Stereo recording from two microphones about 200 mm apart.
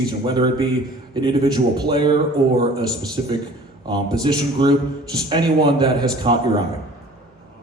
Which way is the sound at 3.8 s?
20° right (ahead or behind).